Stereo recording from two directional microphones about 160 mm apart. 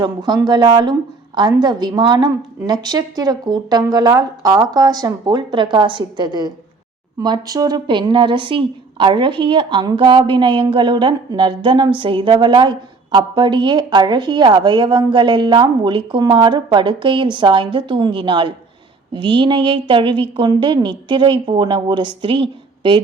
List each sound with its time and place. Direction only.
0.0 s a woman's voice: 25° right (ahead or behind)